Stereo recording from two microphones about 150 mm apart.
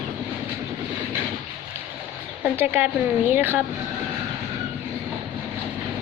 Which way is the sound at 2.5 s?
15° right (ahead or behind).